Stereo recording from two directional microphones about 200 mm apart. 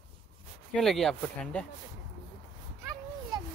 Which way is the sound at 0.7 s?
Centre (ahead or behind).